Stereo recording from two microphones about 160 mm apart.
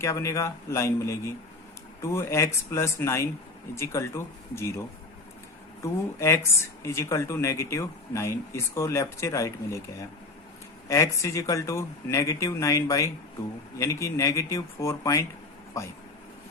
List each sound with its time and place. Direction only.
0.0 s speech: 20° left (ahead or behind)